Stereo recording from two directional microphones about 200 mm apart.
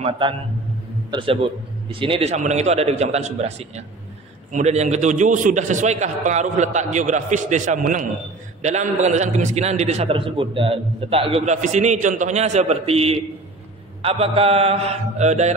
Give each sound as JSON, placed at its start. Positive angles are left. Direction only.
{"t": 0.0, "sound": "a man's voice", "side_deg": -25}